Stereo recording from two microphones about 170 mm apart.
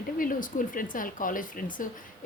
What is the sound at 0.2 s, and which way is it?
Speech, 55° left (ahead or behind).